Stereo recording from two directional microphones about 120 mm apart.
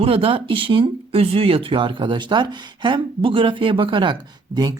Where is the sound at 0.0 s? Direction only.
50° right (ahead or behind).